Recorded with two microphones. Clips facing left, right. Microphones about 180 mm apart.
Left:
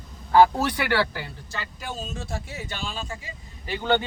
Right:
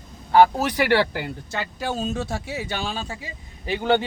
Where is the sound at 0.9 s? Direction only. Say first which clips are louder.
Right 4 dB; 45° right (ahead or behind).